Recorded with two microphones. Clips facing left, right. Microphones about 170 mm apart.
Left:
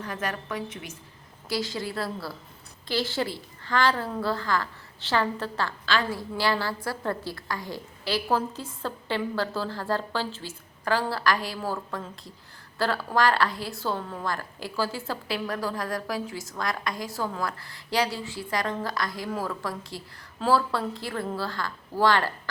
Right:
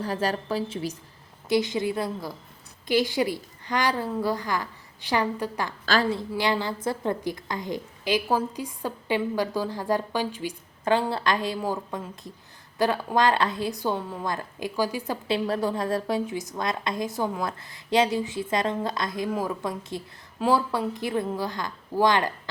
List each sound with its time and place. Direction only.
0.0 s a woman's voice: 30° right (ahead or behind)
1.5 s a woman's voice: 20° right (ahead or behind)
5.8 s a woman's voice: 40° right (ahead or behind)
6.1 s a woman's voice: 20° right (ahead or behind)